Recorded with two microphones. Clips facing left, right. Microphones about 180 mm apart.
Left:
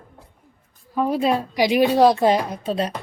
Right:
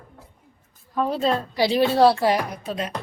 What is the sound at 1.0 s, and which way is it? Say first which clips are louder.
Speech: left 2 dB; 10° left (ahead or behind).